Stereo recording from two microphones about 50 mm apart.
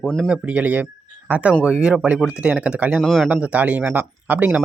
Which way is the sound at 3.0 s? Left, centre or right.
Centre.